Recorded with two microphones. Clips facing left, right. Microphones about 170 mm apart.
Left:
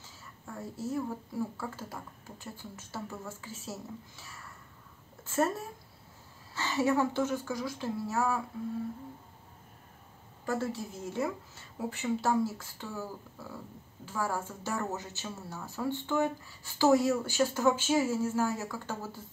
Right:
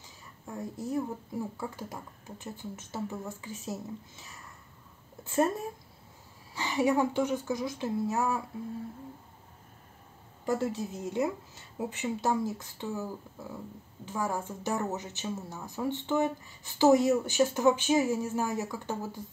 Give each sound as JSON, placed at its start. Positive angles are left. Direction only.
{"t": 0.0, "sound": "speech", "side_deg": -15}
{"t": 10.4, "sound": "speech", "side_deg": -15}